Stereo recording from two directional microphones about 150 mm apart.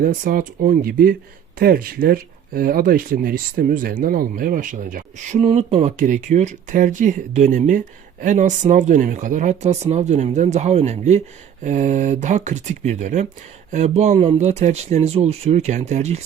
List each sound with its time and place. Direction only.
0.0 s speech: 70° right (ahead or behind); by 16.2 s 50° right (ahead or behind)